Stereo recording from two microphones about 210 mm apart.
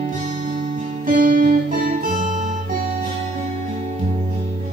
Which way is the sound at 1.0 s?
40° right (ahead or behind).